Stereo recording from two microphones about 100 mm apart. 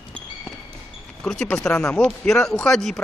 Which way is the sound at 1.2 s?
10° left (ahead or behind).